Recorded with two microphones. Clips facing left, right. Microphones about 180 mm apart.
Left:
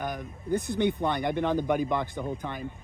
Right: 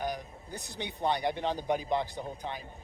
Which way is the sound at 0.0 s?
55° left (ahead or behind).